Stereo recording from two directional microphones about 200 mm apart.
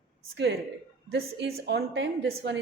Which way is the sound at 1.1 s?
60° right (ahead or behind).